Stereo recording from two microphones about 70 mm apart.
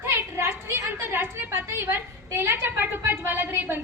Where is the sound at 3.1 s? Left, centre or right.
Right.